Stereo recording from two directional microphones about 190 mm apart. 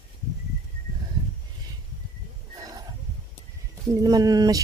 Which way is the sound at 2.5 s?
20° right (ahead or behind).